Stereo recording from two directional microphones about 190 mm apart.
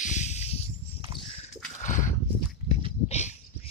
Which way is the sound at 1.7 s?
40° left (ahead or behind).